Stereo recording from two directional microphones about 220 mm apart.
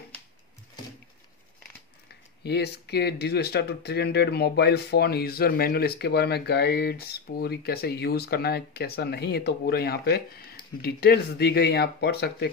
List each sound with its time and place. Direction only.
2.4 s speech: 50° left (ahead or behind)